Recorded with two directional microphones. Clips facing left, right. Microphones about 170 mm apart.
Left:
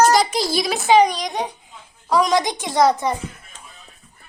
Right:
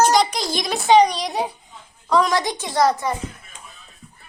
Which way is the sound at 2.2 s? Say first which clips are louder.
Left 2 dB; 15° left (ahead or behind).